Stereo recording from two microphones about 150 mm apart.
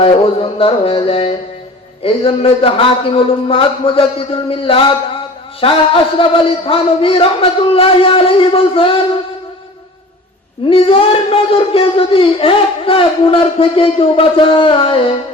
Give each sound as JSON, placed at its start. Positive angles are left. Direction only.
{"t": 0.0, "sound": "speech", "side_deg": 40}
{"t": 10.7, "sound": "speech", "side_deg": 40}